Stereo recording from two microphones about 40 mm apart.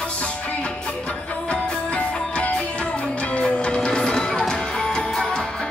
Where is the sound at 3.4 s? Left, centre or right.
Left.